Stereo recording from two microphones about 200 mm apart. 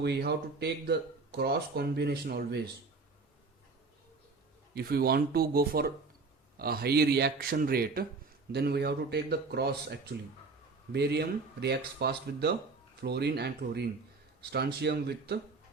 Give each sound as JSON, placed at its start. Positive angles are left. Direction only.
{"t": 0.0, "sound": "speech", "side_deg": -55}
{"t": 4.7, "sound": "speech", "side_deg": -50}